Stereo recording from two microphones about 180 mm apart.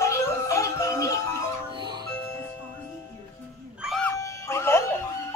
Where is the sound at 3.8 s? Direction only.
Centre (ahead or behind).